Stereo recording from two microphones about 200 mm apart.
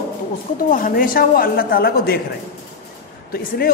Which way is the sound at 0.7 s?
45° left (ahead or behind).